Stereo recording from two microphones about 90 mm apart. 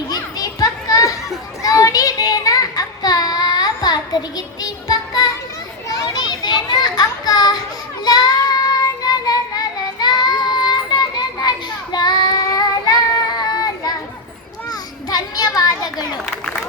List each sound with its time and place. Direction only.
0.1 s children playing: 45° left (ahead or behind)
1.6 s child singing: 40° left (ahead or behind)
5.9 s children playing: 45° left (ahead or behind)
8.0 s child singing: 50° left (ahead or behind)
14.7 s children playing: 45° left (ahead or behind)